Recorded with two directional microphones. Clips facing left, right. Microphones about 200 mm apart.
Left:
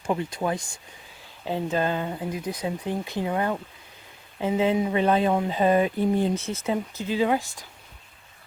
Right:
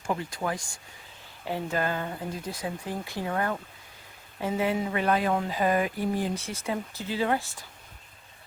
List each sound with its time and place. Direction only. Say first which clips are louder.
0.0 s speech: left 4 dB; 20° left (ahead or behind)